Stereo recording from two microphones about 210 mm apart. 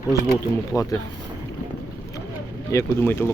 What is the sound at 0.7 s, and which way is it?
Speech, centre (ahead or behind).